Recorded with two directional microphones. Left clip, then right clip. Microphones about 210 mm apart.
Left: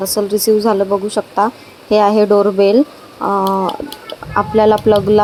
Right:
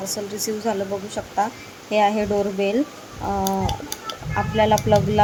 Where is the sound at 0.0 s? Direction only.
10° left (ahead or behind).